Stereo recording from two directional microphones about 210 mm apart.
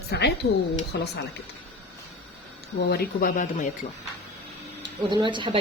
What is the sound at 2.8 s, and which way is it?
Speech, 50° left (ahead or behind).